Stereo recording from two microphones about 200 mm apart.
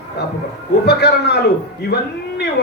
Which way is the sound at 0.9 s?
55° left (ahead or behind).